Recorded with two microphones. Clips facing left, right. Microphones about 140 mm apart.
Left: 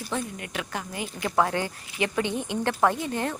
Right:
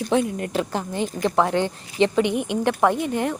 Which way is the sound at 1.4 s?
20° right (ahead or behind).